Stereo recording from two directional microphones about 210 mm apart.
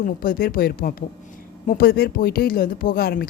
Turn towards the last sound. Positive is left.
turn(degrees=45)  # may be behind; listen again after turning